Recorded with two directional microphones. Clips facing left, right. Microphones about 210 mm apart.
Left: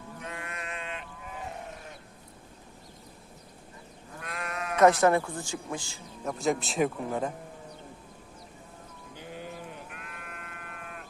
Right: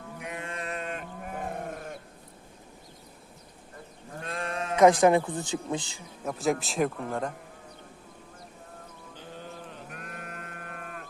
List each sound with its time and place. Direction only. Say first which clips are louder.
0.2 s mantra: right 3 dB; 15° right (ahead or behind)
0.4 s sheep: right 4 dB; 30° right (ahead or behind); by 2.0 s 50° right (ahead or behind)
4.2 s sheep: right 3 dB; 30° right (ahead or behind)
4.8 s a woman's voice: right 2 dB; 15° right (ahead or behind)
6.2 s speech: right 1 dB; centre (ahead or behind)
9.1 s sheep: left 2 dB; 10° left (ahead or behind)
9.9 s sheep: right 4 dB; 45° right (ahead or behind)